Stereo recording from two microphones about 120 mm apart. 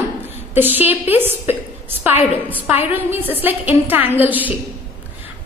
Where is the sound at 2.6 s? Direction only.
15° right (ahead or behind).